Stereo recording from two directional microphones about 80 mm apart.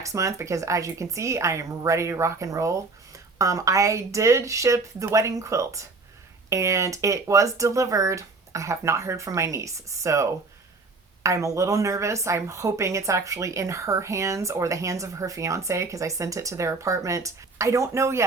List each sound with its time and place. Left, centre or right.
0.0 s a woman's voice: right